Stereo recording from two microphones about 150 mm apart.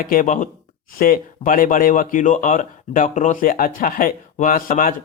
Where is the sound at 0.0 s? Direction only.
65° left (ahead or behind).